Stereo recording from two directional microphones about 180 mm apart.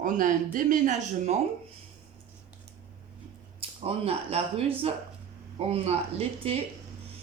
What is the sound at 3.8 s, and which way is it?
Speech, 35° right (ahead or behind).